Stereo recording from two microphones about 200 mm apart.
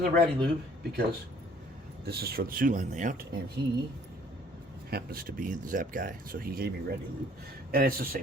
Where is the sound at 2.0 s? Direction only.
50° right (ahead or behind).